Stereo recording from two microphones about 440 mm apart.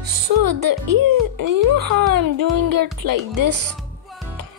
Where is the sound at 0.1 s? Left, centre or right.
Right.